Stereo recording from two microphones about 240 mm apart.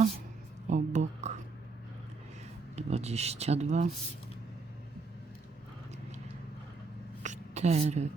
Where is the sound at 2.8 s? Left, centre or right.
Right.